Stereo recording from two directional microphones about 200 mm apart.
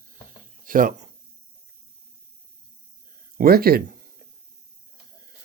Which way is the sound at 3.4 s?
50° right (ahead or behind).